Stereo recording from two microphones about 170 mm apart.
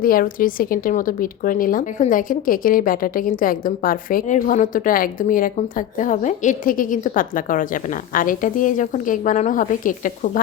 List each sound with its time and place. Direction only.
0.0 s a woman's voice: 55° left (ahead or behind)